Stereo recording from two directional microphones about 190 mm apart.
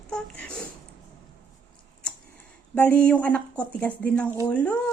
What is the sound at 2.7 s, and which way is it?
Speech, 10° left (ahead or behind).